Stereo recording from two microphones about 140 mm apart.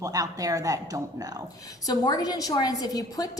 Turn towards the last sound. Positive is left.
turn(degrees=25)  # may be behind; listen again after turning